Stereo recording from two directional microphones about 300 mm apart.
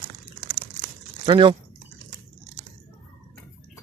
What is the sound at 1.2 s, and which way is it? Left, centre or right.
Speech, centre.